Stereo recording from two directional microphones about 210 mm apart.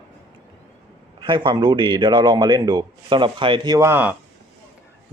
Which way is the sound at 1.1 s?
25° right (ahead or behind).